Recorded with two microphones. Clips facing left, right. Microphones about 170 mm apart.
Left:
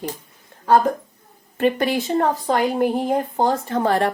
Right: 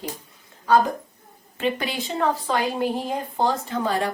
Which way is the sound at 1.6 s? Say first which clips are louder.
Left 6 dB; 50° left (ahead or behind).